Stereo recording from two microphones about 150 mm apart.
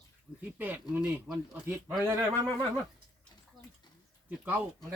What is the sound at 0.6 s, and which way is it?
Speech, 10° right (ahead or behind).